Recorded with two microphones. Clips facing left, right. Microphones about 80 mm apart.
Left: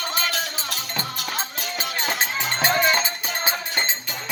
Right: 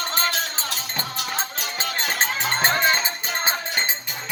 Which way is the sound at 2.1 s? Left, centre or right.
Right.